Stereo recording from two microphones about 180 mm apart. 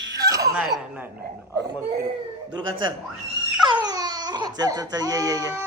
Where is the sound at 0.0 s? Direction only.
20° right (ahead or behind).